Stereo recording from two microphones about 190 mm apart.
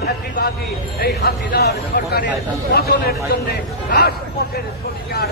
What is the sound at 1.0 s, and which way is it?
A man's voice, 55° left (ahead or behind).